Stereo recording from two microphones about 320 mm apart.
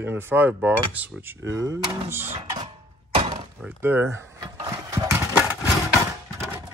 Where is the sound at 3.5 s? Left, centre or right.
Centre.